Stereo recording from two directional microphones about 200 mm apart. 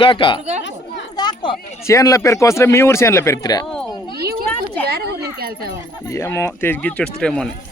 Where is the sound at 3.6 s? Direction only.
5° left (ahead or behind).